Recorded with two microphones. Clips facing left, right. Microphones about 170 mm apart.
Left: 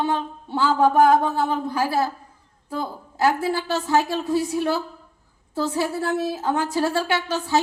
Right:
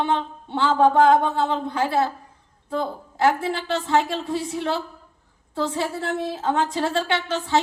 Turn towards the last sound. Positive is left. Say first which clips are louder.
# even
turn(degrees=-25)  # may be behind; listen again after turning